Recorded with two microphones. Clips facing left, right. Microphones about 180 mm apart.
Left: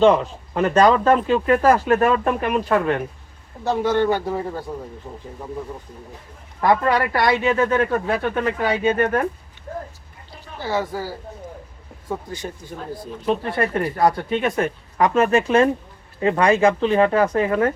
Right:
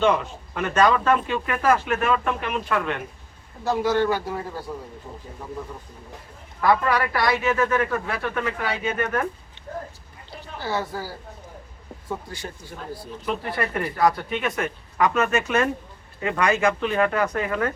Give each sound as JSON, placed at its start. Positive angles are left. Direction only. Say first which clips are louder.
{"t": 0.0, "sound": "speech", "louder": "left 6 dB", "side_deg": 35}
{"t": 4.0, "sound": "speech", "louder": "left 3 dB", "side_deg": 25}
{"t": 6.6, "sound": "speech", "louder": "left 3 dB", "side_deg": 25}
{"t": 10.6, "sound": "speech", "louder": "left 4 dB", "side_deg": 15}
{"t": 12.0, "sound": "speech", "louder": "left 4 dB", "side_deg": 15}
{"t": 13.2, "sound": "speech", "louder": "left 6 dB", "side_deg": 30}